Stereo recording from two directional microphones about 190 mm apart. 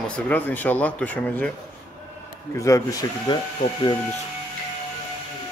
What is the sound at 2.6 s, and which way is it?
Speech, 15° left (ahead or behind).